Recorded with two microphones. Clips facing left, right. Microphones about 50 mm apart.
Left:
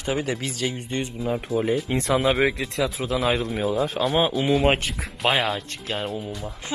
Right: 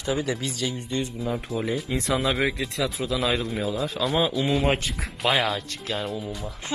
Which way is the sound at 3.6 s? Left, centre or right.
Left.